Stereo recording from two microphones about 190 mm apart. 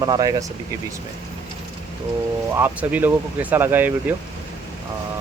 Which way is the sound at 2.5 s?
10° right (ahead or behind).